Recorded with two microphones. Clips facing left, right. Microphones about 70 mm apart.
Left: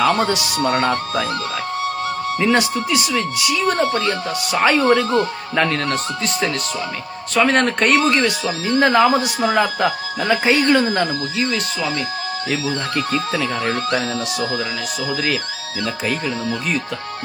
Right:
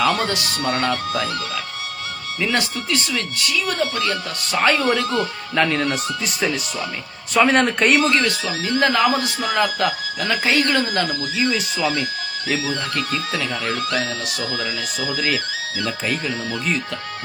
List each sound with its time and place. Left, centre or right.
0.0 s speech: left
2.4 s speech: left
3.0 s speech: centre
3.5 s speech: left
5.5 s speech: centre
5.8 s speech: centre
8.2 s speech: left